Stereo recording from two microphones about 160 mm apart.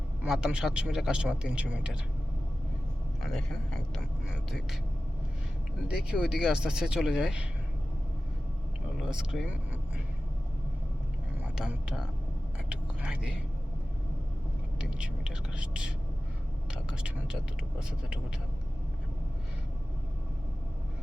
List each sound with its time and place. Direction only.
0.2 s speech: 5° right (ahead or behind)
3.2 s speech: centre (ahead or behind)
5.9 s speech: 5° right (ahead or behind)
9.0 s speech: 5° right (ahead or behind)
11.5 s speech: 5° right (ahead or behind)
12.6 s whispering: 5° right (ahead or behind)
14.8 s whispering: 5° right (ahead or behind)
16.7 s speech: 5° right (ahead or behind)